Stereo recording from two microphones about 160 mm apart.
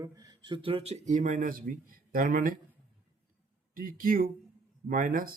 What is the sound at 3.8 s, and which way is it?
Speech, 60° right (ahead or behind).